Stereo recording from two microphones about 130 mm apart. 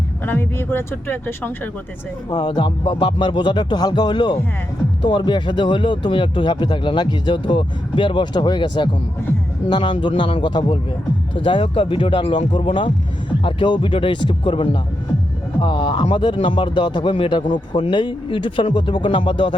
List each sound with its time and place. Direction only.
0.3 s speech: 20° left (ahead or behind)
2.3 s speech: 35° left (ahead or behind)